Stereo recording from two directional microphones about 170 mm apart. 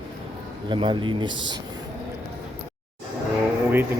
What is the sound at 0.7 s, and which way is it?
Speech, 30° right (ahead or behind).